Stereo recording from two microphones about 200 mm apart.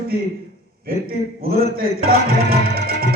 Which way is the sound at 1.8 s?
50° right (ahead or behind).